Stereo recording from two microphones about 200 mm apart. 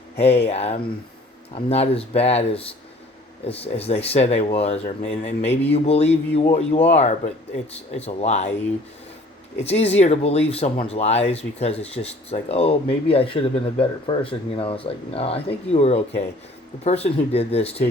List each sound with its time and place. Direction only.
0.2 s speech: 30° left (ahead or behind)
9.6 s speech: 30° left (ahead or behind)